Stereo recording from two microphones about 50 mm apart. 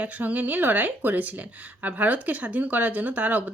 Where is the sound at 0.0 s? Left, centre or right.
Right.